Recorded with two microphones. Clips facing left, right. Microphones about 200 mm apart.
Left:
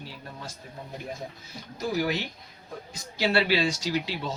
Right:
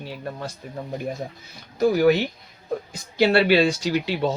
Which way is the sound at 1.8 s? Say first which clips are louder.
Right 10 dB; 60° right (ahead or behind).